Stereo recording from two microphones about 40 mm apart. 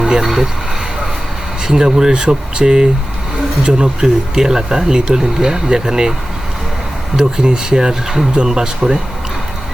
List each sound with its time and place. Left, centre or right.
0.0 s speech: centre
1.6 s speech: centre
7.2 s speech: centre